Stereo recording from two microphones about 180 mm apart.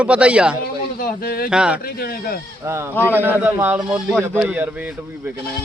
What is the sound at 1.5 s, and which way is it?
Speech, 5° right (ahead or behind).